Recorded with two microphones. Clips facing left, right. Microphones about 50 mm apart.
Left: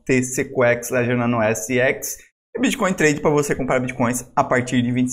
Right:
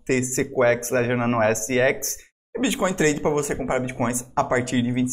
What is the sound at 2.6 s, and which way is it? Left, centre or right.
A man's voice, left.